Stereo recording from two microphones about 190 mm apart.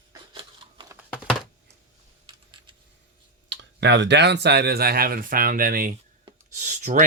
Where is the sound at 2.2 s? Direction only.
25° right (ahead or behind).